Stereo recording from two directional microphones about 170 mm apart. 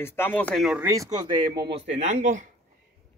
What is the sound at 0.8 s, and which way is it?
Speech, 20° right (ahead or behind).